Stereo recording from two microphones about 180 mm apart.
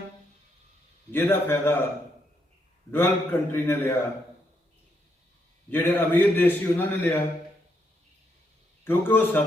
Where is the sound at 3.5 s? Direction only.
15° left (ahead or behind).